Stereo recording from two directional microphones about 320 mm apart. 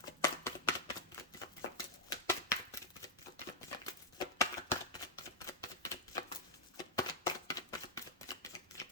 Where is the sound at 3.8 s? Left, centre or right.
Centre.